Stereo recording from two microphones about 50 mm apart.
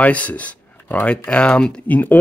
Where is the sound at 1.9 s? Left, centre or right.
Left.